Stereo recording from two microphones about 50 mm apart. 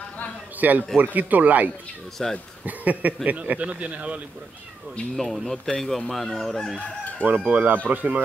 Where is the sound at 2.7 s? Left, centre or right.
Right.